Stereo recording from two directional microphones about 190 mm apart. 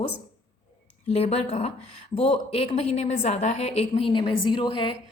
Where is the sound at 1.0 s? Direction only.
30° left (ahead or behind).